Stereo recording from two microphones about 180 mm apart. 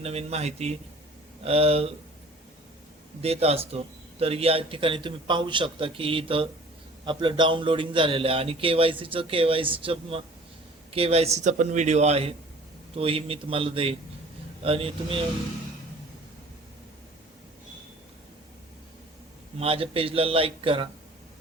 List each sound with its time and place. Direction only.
0.0 s speech: 35° right (ahead or behind)
3.2 s a man's voice: 35° right (ahead or behind)
19.5 s speech: 30° right (ahead or behind)